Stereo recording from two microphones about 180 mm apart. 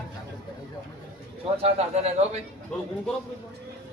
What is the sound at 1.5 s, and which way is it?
Speech, 35° right (ahead or behind).